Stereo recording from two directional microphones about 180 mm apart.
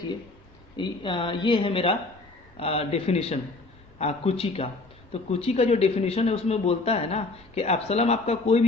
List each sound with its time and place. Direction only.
0.8 s a woman's voice: 25° left (ahead or behind)